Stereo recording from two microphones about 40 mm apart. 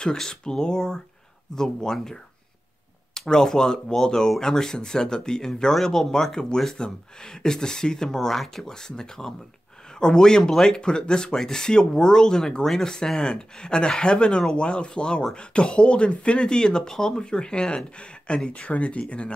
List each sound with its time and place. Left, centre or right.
0.0 s speech: centre
3.2 s speech: centre
5.8 s speech: centre
10.8 s speech: left